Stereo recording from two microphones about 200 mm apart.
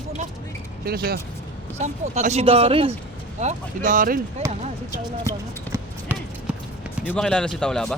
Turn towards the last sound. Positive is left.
turn(degrees=5)  # may be behind; listen again after turning